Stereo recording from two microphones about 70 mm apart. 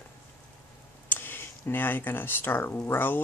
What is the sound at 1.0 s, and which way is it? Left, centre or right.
Speech, left.